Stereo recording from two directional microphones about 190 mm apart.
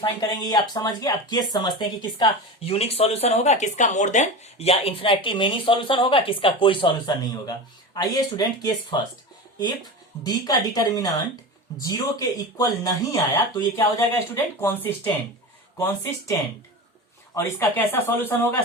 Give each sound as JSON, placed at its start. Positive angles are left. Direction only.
{"t": 0.0, "sound": "speech", "side_deg": 20}
{"t": 10.2, "sound": "speech", "side_deg": 20}
{"t": 12.5, "sound": "speech", "side_deg": 20}